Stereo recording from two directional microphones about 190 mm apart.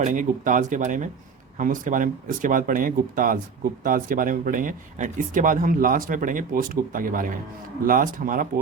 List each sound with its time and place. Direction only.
0.0 s speech: 40° right (ahead or behind)